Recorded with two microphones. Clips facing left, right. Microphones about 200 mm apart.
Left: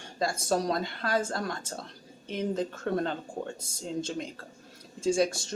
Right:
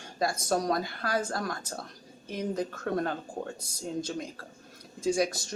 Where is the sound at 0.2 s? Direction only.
25° left (ahead or behind).